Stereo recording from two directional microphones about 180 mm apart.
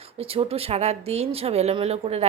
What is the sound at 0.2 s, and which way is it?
Speech, 30° right (ahead or behind).